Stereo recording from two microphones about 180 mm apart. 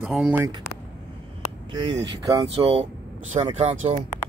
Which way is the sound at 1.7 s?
25° right (ahead or behind).